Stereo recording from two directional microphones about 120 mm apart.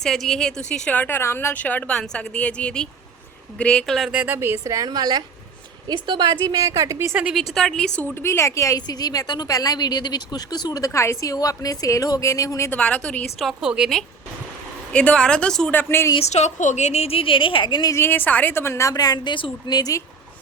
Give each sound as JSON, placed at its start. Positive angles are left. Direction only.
{"t": 0.0, "sound": "a woman's voice", "side_deg": 5}
{"t": 0.9, "sound": "a woman's voice", "side_deg": 15}
{"t": 4.1, "sound": "a woman's voice", "side_deg": -10}
{"t": 7.3, "sound": "a woman's voice", "side_deg": 0}
{"t": 8.0, "sound": "a woman's voice", "side_deg": 20}
{"t": 12.7, "sound": "a woman's voice", "side_deg": 10}
{"t": 13.4, "sound": "a woman's voice", "side_deg": -5}
{"t": 14.9, "sound": "a woman's voice", "side_deg": 10}
{"t": 16.1, "sound": "speech", "side_deg": 65}
{"t": 17.9, "sound": "a woman's voice", "side_deg": 20}